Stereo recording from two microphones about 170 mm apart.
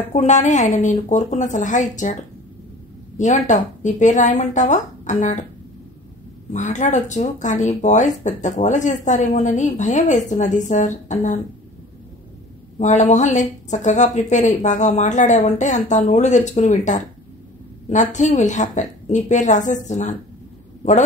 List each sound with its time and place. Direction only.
0.1 s speech: 40° left (ahead or behind)
3.2 s speech: 45° left (ahead or behind)
6.5 s speech: 45° left (ahead or behind)
12.7 s speech: 40° left (ahead or behind)